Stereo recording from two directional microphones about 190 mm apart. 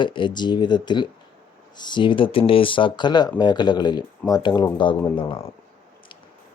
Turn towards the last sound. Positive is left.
turn(degrees=25)  # may be behind; listen again after turning